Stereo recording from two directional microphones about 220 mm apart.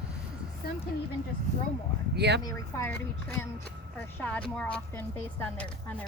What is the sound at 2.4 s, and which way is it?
Speech, 15° left (ahead or behind).